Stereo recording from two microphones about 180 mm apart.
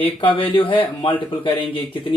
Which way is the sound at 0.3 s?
30° left (ahead or behind).